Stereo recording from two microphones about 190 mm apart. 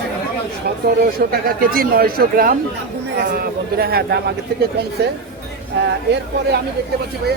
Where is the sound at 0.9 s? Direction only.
55° right (ahead or behind).